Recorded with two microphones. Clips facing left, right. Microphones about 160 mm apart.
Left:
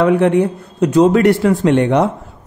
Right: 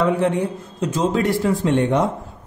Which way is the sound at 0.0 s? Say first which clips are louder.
Left 6 dB; 70° left (ahead or behind).